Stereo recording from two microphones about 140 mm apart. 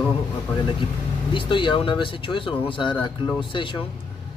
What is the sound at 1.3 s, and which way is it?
Speech, 35° left (ahead or behind).